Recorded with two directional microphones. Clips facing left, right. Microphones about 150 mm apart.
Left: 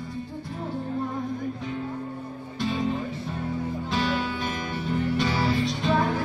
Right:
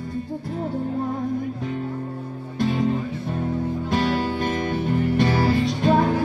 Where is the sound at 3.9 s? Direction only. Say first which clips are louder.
Right 4 dB; 45° right (ahead or behind).